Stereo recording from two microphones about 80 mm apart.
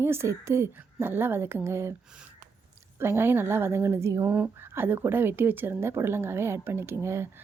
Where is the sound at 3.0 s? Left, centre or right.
Right.